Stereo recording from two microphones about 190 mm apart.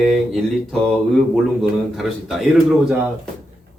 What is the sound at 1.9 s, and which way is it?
Speech, centre (ahead or behind).